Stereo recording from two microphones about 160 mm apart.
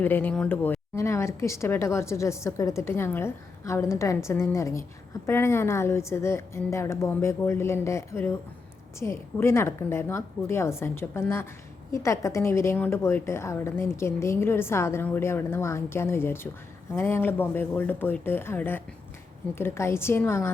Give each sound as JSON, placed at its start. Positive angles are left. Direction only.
{"t": 0.0, "sound": "a woman's voice", "side_deg": 10}